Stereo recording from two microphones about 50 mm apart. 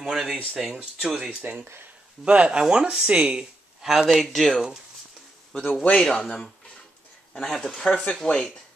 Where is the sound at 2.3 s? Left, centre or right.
Right.